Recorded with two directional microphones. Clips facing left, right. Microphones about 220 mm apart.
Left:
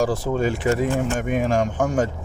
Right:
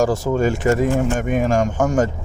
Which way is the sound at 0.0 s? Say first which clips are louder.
Right 3 dB; 45° right (ahead or behind).